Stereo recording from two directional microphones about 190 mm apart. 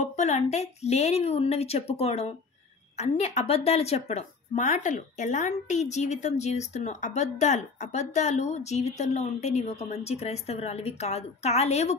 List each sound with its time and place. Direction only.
0.0 s speech: 40° left (ahead or behind)